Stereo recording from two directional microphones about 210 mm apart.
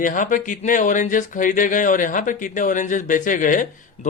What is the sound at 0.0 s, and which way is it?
Speech, 40° left (ahead or behind).